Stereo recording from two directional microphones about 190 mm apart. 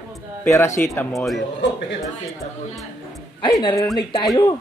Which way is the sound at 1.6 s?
70° left (ahead or behind).